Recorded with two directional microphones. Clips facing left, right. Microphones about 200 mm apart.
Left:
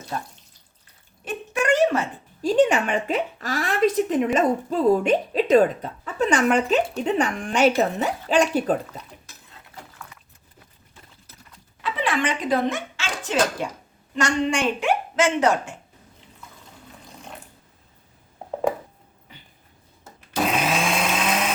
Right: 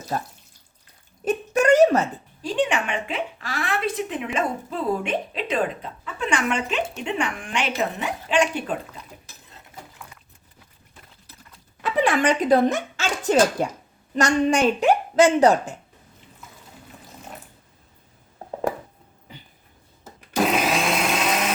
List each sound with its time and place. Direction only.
0.1 s speech: 40° right (ahead or behind)
1.2 s a sound: 40° right (ahead or behind)
2.4 s speech: 40° left (ahead or behind)
11.8 s speech: 45° right (ahead or behind)
20.3 s blender: centre (ahead or behind)